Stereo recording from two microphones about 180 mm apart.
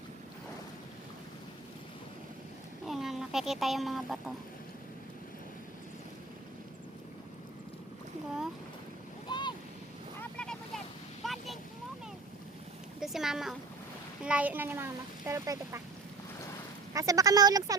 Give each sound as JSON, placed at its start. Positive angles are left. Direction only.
{"t": 2.8, "sound": "speech", "side_deg": 0}
{"t": 9.3, "sound": "waves", "side_deg": 25}
{"t": 10.2, "sound": "vehicle", "side_deg": 5}
{"t": 13.0, "sound": "a sound", "side_deg": -5}
{"t": 14.2, "sound": "speech", "side_deg": -5}
{"t": 16.9, "sound": "speech", "side_deg": -20}